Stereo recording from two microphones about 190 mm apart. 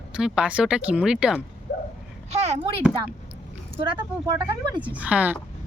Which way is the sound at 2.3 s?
35° right (ahead or behind).